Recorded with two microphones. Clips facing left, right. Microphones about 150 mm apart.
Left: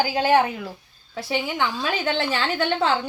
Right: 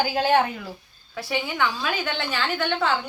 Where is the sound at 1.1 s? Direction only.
25° left (ahead or behind).